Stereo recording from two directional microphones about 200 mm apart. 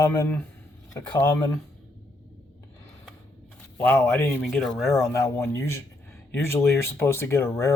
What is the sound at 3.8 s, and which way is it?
Speech, 10° left (ahead or behind).